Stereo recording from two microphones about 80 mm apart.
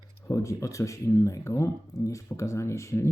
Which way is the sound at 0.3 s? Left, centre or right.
Left.